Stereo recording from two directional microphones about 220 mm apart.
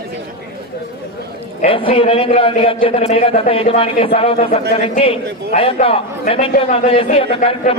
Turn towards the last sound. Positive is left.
turn(degrees=25)  # may be behind; listen again after turning